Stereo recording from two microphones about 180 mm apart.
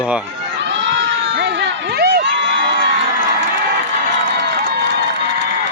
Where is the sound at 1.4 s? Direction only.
70° right (ahead or behind).